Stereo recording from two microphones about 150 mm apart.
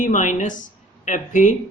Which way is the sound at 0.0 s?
55° left (ahead or behind).